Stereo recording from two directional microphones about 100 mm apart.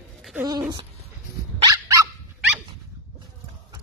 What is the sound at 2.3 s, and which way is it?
Dog, 15° right (ahead or behind).